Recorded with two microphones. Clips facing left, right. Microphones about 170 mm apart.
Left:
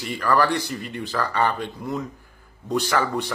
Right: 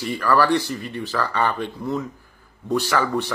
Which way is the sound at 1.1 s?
30° left (ahead or behind).